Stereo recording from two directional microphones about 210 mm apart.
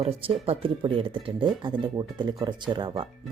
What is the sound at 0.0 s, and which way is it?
Speech, 25° right (ahead or behind).